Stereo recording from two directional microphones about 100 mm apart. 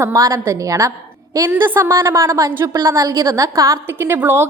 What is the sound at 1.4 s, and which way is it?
A woman's voice, 20° right (ahead or behind).